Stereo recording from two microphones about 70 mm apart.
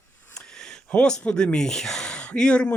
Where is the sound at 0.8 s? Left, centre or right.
Centre.